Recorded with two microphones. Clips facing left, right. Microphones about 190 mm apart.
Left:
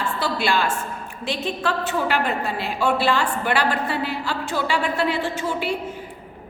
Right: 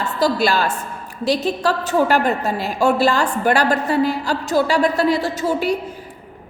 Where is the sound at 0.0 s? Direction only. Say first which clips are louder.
Right 6 dB; 40° right (ahead or behind).